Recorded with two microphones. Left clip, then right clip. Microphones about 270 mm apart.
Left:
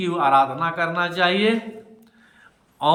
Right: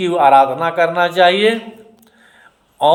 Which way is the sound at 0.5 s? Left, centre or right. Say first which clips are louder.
Right 7 dB; centre.